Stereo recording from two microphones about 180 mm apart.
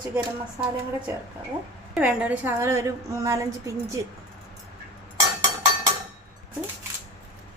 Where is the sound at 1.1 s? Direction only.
15° right (ahead or behind).